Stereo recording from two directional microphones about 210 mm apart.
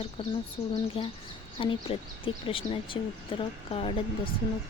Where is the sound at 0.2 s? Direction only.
25° left (ahead or behind).